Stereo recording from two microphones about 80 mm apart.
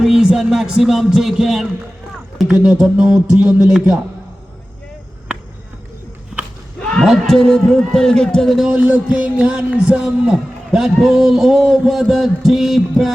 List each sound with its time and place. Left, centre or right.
0.0 s a man's voice: centre
7.0 s a man's voice: centre
8.7 s a man's voice: centre